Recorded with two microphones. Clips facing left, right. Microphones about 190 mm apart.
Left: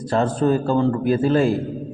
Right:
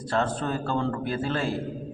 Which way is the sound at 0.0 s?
15° left (ahead or behind).